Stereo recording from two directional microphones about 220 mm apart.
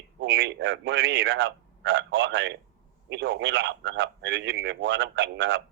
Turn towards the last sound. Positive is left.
turn(degrees=-55)  # may be behind; listen again after turning